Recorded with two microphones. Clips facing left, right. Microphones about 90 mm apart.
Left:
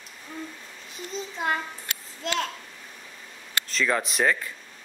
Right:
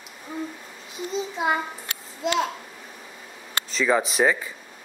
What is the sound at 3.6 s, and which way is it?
Speech, 5° right (ahead or behind).